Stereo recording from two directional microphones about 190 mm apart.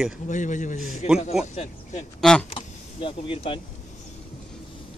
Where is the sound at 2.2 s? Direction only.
5° left (ahead or behind).